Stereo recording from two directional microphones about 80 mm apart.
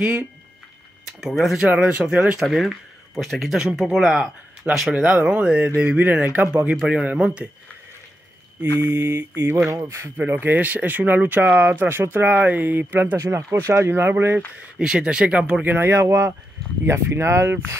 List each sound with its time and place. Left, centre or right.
0.0 s speech: centre
1.2 s speech: centre
1.7 s speech: centre
2.4 s speech: centre
8.7 s speech: right
10.1 s speech: right
13.2 s speech: right
14.8 s speech: centre; by 17.6 s right